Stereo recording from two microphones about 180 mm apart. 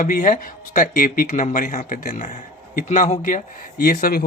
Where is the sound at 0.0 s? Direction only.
50° left (ahead or behind).